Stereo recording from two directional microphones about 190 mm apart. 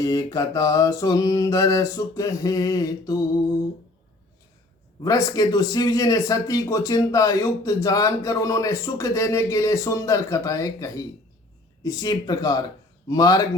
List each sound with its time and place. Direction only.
0.0 s speech: 20° left (ahead or behind)
5.0 s speech: 20° left (ahead or behind)